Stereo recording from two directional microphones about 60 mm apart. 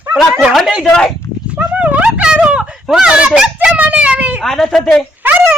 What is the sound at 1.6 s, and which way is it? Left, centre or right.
Speech, right.